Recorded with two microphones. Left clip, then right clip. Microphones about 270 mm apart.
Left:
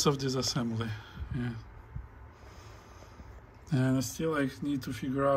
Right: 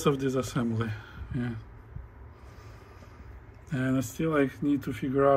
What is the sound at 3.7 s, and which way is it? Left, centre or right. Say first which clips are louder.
Speech: right 1 dB; centre.